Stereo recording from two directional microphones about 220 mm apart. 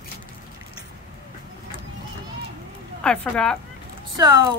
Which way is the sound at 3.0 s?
5° left (ahead or behind).